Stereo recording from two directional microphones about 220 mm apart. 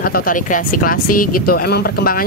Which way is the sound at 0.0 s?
40° left (ahead or behind).